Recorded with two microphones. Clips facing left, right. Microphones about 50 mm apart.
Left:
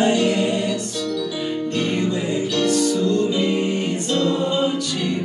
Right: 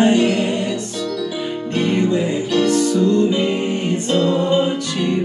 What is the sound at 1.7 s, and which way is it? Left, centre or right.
Music, right.